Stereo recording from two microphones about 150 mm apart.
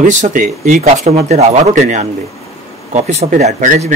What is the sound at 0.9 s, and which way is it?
Speech, 45° right (ahead or behind).